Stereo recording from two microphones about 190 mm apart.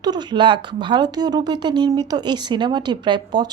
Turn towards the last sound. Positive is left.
turn(degrees=-25)  # may be behind; listen again after turning